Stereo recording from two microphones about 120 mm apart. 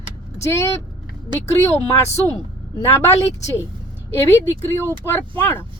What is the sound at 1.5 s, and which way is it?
A woman's voice, 25° left (ahead or behind).